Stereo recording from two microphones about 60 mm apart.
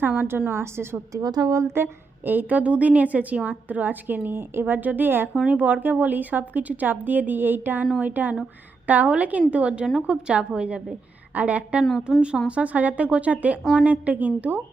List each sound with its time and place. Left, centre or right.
0.2 s a woman's voice: right
1.1 s a woman's voice: right
1.6 s a woman's voice: right
5.5 s a woman's voice: right
12.1 s a woman's voice: centre
12.5 s a woman's voice: right